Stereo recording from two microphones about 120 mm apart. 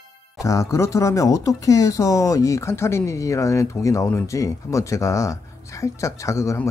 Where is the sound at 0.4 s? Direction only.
25° left (ahead or behind).